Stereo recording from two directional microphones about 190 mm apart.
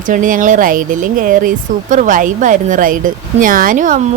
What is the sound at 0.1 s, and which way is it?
Speech, 45° right (ahead or behind).